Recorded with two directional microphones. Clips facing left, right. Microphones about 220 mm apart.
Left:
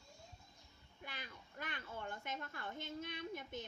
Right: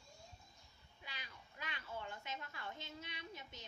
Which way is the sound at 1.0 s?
50° left (ahead or behind).